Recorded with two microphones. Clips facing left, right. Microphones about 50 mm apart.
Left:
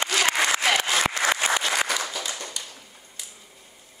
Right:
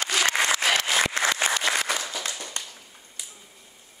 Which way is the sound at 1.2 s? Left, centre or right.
Left.